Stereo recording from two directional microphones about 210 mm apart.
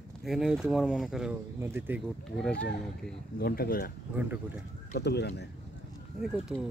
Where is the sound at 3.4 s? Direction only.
45° left (ahead or behind).